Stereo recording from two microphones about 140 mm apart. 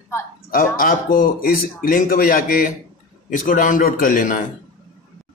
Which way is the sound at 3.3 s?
65° left (ahead or behind).